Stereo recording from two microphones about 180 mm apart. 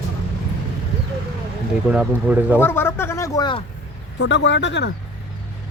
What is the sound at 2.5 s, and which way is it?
Speech, 10° left (ahead or behind).